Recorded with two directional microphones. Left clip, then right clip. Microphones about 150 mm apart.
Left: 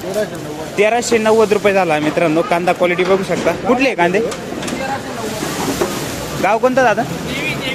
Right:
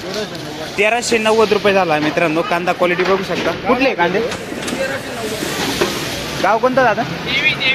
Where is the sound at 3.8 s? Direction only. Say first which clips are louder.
Even; 40° left (ahead or behind).